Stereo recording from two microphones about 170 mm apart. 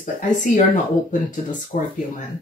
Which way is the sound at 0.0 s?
50° left (ahead or behind).